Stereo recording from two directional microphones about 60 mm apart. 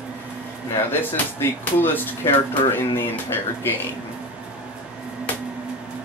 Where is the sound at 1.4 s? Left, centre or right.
Left.